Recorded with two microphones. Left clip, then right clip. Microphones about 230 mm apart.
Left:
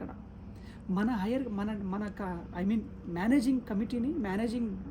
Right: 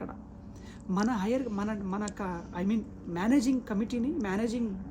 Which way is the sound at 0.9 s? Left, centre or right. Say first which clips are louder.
Right 3 dB; centre.